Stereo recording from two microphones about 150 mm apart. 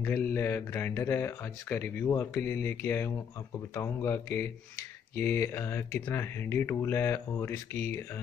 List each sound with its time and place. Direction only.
0.0 s speech: 15° left (ahead or behind)